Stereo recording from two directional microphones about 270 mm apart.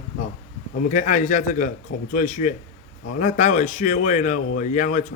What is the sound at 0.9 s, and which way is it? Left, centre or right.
A man's voice, left.